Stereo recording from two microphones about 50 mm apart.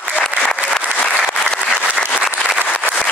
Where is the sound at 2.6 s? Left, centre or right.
Left.